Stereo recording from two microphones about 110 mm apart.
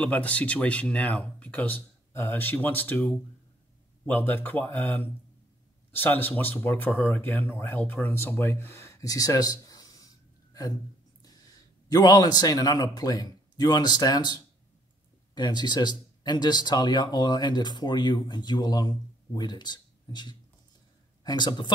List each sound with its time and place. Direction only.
0.0 s speech: 10° left (ahead or behind); by 10.0 s 35° left (ahead or behind)
11.9 s speech: 35° left (ahead or behind)